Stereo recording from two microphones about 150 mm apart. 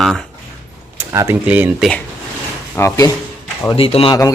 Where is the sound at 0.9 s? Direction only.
15° right (ahead or behind).